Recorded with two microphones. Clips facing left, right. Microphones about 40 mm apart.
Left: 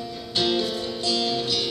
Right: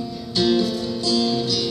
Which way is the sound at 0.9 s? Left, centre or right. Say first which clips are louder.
Right 4 dB; centre.